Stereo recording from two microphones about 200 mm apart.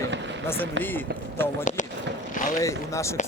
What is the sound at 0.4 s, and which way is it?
Speech, 10° left (ahead or behind).